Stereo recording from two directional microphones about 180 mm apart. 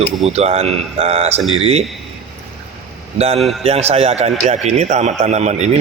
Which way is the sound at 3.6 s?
35° right (ahead or behind).